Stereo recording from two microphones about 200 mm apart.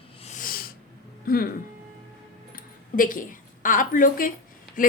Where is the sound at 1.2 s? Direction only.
50° left (ahead or behind).